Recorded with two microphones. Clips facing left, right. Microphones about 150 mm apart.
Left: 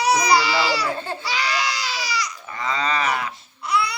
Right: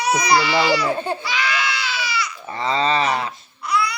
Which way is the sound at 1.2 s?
35° left (ahead or behind).